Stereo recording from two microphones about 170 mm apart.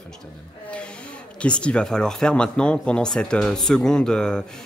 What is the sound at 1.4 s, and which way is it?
Speech, 5° left (ahead or behind).